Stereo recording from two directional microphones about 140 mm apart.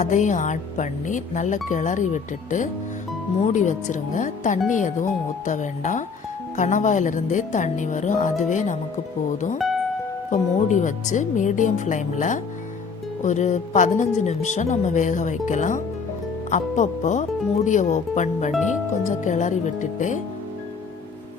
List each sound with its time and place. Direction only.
0.0 s speech: 60° left (ahead or behind)
10.2 s speech: 60° left (ahead or behind)